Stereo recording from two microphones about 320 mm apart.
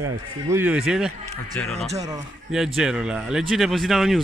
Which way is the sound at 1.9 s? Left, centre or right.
Centre.